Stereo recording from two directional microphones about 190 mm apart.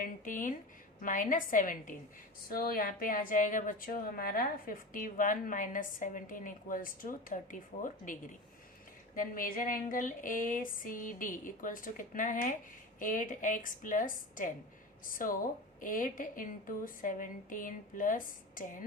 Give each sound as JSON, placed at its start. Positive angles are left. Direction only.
{"t": 0.0, "sound": "a woman's voice", "side_deg": 45}